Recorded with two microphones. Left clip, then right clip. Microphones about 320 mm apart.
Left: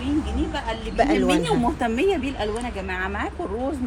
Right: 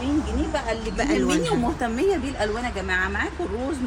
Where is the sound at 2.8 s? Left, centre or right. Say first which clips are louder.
Right 5 dB; left.